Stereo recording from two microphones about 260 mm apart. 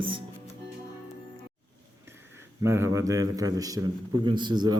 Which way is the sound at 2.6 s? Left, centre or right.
Centre.